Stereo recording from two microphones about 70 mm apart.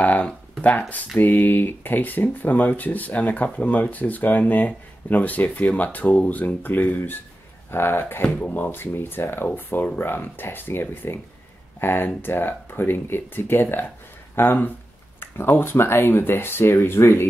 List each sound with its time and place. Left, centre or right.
0.0 s a sound: left
1.1 s speech: left
8.7 s speech: left